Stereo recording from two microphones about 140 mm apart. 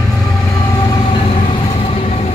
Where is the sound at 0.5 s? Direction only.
20° left (ahead or behind).